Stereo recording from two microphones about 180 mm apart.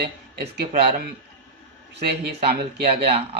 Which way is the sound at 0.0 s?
55° right (ahead or behind).